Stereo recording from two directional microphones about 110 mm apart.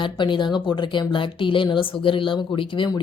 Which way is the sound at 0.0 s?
45° left (ahead or behind).